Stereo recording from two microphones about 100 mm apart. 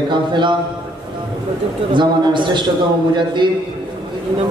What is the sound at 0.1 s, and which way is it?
Speech, 50° right (ahead or behind).